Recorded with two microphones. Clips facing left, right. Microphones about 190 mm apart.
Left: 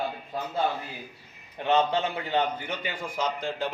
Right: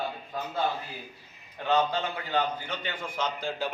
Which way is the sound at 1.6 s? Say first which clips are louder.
Left 2 dB; 25° left (ahead or behind).